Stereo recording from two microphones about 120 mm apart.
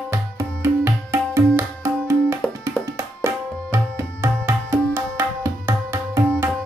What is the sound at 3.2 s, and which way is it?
Tabla, 20° right (ahead or behind).